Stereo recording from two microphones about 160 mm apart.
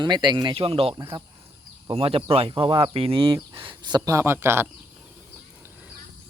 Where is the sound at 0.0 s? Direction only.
30° right (ahead or behind).